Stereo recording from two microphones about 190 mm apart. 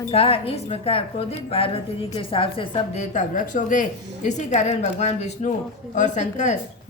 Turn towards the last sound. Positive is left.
turn(degrees=40)  # may be behind; listen again after turning